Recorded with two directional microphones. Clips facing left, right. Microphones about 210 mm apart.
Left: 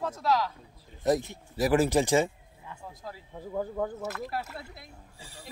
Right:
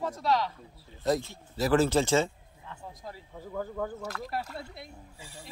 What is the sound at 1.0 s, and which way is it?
Speech, 20° left (ahead or behind).